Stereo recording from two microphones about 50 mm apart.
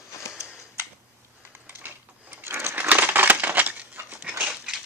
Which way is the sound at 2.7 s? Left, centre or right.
Right.